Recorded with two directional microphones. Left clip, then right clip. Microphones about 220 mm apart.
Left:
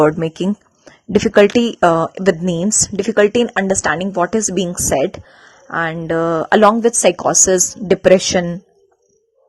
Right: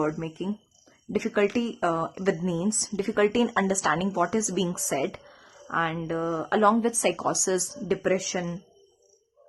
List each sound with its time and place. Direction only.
0.0 s a woman's voice: 35° left (ahead or behind)
6.1 s a woman's voice: 40° left (ahead or behind)